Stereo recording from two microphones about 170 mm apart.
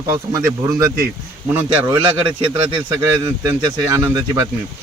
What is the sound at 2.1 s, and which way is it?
Speech, 30° right (ahead or behind).